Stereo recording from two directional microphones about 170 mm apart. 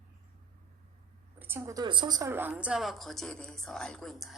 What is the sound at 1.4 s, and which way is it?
Speech, 15° right (ahead or behind).